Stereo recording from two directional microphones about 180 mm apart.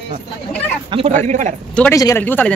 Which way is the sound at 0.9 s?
30° right (ahead or behind).